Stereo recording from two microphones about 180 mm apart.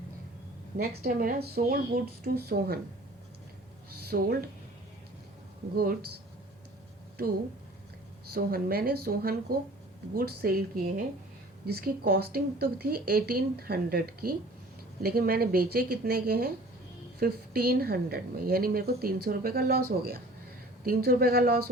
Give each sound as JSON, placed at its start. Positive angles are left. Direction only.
{"t": 0.8, "sound": "a woman's voice", "side_deg": -55}
{"t": 4.1, "sound": "a woman's voice", "side_deg": -60}
{"t": 5.7, "sound": "a woman's voice", "side_deg": -55}
{"t": 8.3, "sound": "a woman's voice", "side_deg": -55}